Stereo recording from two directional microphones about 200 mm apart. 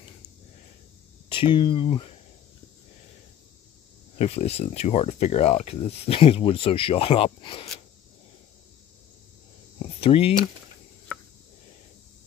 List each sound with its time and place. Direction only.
1.5 s speech: 25° left (ahead or behind)
4.2 s speech: 30° left (ahead or behind)
9.9 s speech: 30° left (ahead or behind)